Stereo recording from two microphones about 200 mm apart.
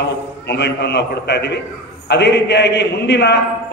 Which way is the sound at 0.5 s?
60° left (ahead or behind).